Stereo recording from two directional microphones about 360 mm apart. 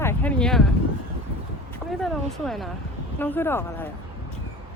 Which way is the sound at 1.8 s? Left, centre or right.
Centre.